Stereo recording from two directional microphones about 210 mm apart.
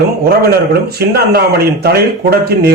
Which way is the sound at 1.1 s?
45° right (ahead or behind).